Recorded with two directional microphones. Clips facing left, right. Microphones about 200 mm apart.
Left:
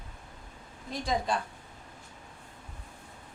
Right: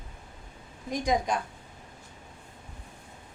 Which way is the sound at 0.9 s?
15° right (ahead or behind).